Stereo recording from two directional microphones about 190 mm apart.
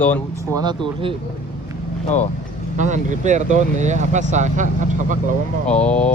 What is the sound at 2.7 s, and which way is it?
Speech, 40° right (ahead or behind).